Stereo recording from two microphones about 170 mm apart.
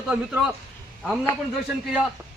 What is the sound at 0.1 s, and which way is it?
Speech, centre (ahead or behind).